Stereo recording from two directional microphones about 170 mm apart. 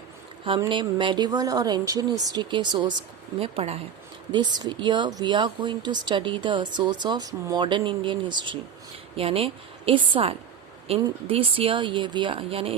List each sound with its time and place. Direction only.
0.4 s speech: 30° right (ahead or behind)